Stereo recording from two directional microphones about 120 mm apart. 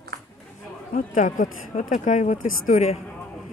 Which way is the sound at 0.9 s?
90° left.